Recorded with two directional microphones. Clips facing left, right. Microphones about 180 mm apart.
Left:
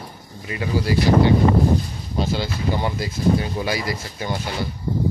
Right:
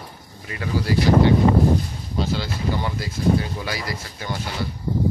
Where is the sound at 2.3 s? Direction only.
15° left (ahead or behind).